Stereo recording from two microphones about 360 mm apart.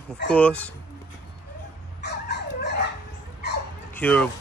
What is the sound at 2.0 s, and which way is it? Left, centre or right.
Dog, left.